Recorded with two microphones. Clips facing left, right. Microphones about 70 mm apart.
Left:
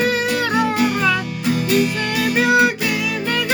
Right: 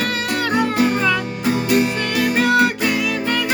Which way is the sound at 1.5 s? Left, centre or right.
Right.